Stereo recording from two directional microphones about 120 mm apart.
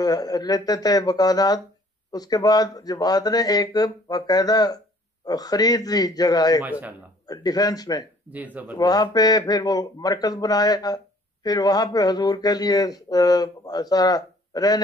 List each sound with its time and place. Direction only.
0.0 s speech: 30° left (ahead or behind)
6.6 s speech: 15° right (ahead or behind)
7.2 s speech: 30° left (ahead or behind)
8.3 s speech: 15° right (ahead or behind)
8.7 s speech: 35° left (ahead or behind)